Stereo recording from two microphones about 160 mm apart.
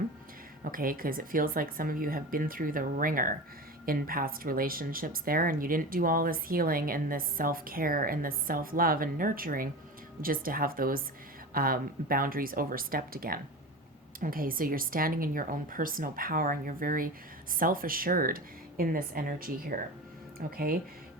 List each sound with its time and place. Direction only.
0.6 s speech: 60° right (ahead or behind)